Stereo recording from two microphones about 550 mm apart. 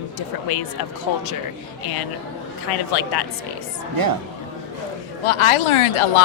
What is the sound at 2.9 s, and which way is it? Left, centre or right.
Speech, left.